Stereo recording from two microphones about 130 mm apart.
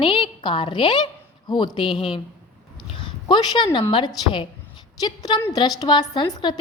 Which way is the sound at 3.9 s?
35° left (ahead or behind).